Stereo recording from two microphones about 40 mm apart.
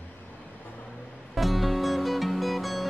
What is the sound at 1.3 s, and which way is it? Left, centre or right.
Music, centre.